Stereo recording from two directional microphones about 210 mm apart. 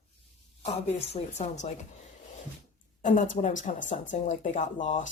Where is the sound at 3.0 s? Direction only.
35° left (ahead or behind).